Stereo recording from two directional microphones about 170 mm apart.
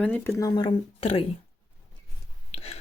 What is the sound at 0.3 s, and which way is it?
Speech, 25° left (ahead or behind).